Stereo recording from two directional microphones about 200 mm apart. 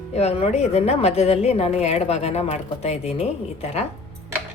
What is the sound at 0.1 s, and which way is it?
A woman's voice, 30° left (ahead or behind).